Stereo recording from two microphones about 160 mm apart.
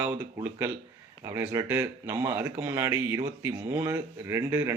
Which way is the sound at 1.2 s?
20° right (ahead or behind).